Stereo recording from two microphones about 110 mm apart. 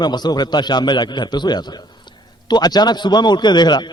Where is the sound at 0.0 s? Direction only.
40° left (ahead or behind).